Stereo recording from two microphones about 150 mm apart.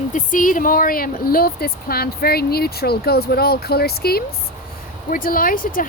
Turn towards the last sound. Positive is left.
turn(degrees=70)  # may be behind; listen again after turning